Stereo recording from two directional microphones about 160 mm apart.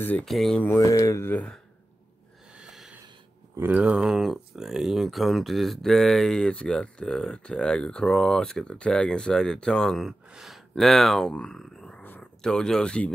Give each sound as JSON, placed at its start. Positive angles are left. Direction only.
{"t": 0.0, "sound": "speech", "side_deg": 10}
{"t": 0.7, "sound": "speech", "side_deg": 20}
{"t": 2.5, "sound": "a sound", "side_deg": -5}
{"t": 3.5, "sound": "speech", "side_deg": -10}